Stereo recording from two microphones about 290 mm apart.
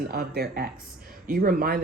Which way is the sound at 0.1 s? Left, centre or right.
Right.